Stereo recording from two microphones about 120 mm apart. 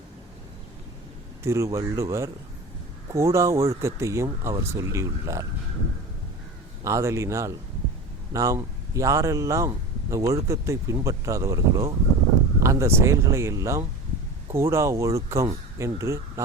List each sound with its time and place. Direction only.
1.5 s a man's voice: 25° right (ahead or behind)
6.8 s a man's voice: 25° right (ahead or behind)